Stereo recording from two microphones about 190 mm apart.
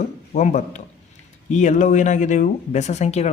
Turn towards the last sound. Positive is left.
turn(degrees=35)  # may be behind; listen again after turning